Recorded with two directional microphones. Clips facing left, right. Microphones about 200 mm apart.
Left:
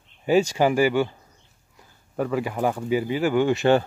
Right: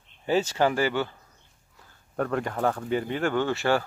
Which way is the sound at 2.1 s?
5° left (ahead or behind).